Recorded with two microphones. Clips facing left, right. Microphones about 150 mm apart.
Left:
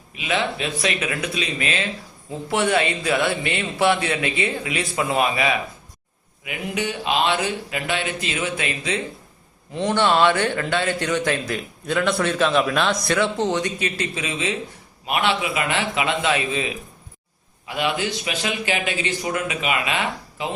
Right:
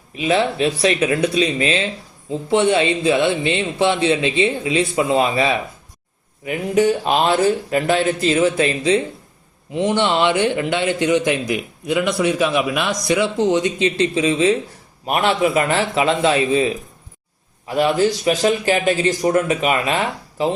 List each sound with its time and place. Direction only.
0.2 s a man's voice: 35° right (ahead or behind)
9.7 s a man's voice: 15° right (ahead or behind); by 20.5 s 40° right (ahead or behind)